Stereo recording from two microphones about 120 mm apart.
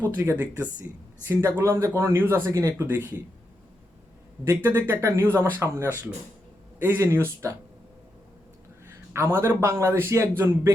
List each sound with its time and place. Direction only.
0.0 s speech: 20° right (ahead or behind)
4.4 s speech: 20° right (ahead or behind)
9.1 s speech: 25° right (ahead or behind)